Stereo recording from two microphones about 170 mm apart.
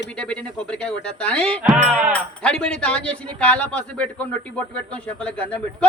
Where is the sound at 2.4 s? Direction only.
5° left (ahead or behind).